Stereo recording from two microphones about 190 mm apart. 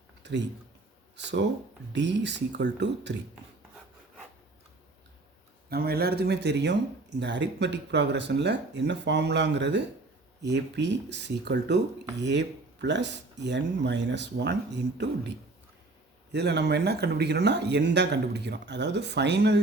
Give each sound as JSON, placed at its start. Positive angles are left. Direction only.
{"t": 0.2, "sound": "a sound", "side_deg": -65}
{"t": 1.1, "sound": "speech", "side_deg": -65}
{"t": 5.6, "sound": "speech", "side_deg": -55}
{"t": 16.3, "sound": "speech", "side_deg": -60}